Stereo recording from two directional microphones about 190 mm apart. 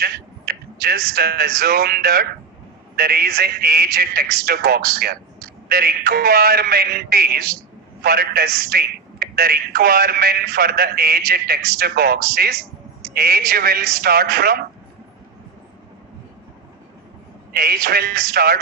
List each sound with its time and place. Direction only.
0.0 s a man's voice: 55° right (ahead or behind)
17.5 s a man's voice: 55° right (ahead or behind)